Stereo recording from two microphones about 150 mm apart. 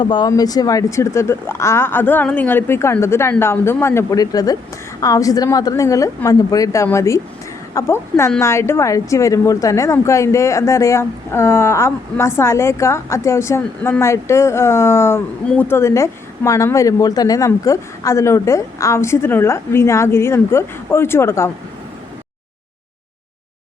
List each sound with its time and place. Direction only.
0.0 s a woman's voice: 30° left (ahead or behind)